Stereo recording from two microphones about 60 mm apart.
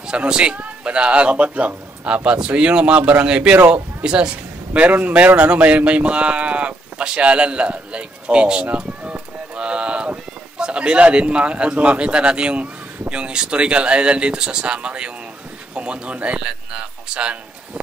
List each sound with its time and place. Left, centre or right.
0.0 s a man's voice: centre
4.0 s speech: centre
4.7 s speech: right